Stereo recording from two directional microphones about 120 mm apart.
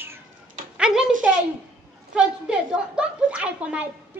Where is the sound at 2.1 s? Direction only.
10° right (ahead or behind).